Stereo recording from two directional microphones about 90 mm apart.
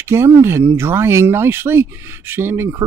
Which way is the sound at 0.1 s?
25° right (ahead or behind).